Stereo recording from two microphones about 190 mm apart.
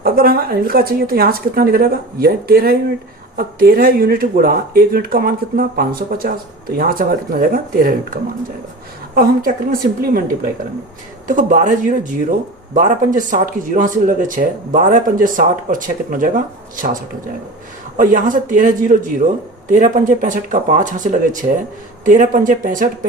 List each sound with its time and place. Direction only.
0.0 s speech: 50° right (ahead or behind)
11.3 s speech: 45° right (ahead or behind)